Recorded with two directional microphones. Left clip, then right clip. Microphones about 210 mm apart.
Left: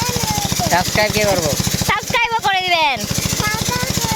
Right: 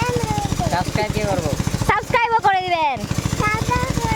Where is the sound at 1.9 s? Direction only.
20° right (ahead or behind).